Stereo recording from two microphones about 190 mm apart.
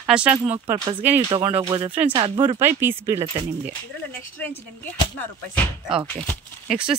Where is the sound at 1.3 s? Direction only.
30° right (ahead or behind).